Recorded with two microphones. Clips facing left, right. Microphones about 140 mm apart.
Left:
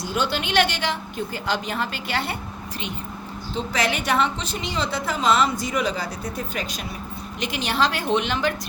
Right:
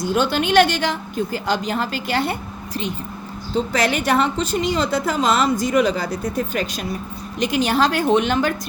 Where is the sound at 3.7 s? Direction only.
45° right (ahead or behind).